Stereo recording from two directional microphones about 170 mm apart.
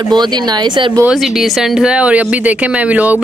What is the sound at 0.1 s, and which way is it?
Speech, 25° right (ahead or behind).